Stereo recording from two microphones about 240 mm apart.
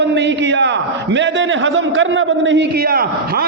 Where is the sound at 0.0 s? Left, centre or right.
Right.